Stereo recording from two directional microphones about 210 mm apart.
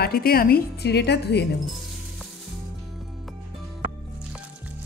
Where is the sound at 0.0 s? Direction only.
45° left (ahead or behind).